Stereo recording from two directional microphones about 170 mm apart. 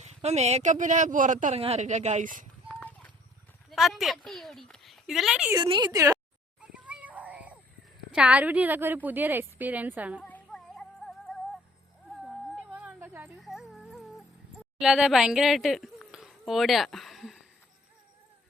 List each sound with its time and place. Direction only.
0.0 s speech: 40° right (ahead or behind)
2.6 s clip-clop: 10° left (ahead or behind)
3.7 s speech: centre (ahead or behind)
5.5 s speech: 25° right (ahead or behind)
6.6 s children playing: 5° right (ahead or behind)
8.1 s speech: 5° right (ahead or behind)
10.2 s music: 5° left (ahead or behind)
12.2 s a sound: 5° right (ahead or behind)
13.4 s music: centre (ahead or behind)
14.8 s speech: 5° right (ahead or behind)